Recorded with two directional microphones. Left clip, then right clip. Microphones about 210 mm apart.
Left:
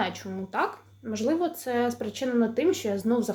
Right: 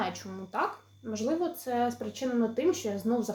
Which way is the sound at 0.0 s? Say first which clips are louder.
Left 4 dB; 15° left (ahead or behind).